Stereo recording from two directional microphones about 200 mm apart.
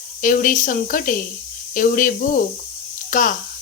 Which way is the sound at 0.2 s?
40° left (ahead or behind).